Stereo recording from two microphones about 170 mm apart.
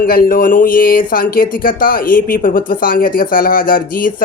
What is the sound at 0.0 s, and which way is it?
Speech, 55° left (ahead or behind).